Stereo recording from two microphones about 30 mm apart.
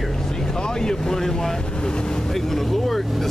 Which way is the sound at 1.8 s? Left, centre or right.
Left.